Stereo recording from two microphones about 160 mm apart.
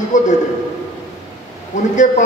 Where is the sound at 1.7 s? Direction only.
50° left (ahead or behind).